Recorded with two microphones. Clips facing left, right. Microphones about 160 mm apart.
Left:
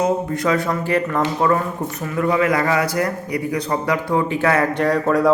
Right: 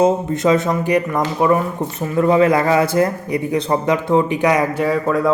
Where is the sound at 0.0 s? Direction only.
20° right (ahead or behind).